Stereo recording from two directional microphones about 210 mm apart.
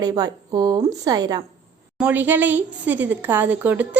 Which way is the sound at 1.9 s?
5° right (ahead or behind).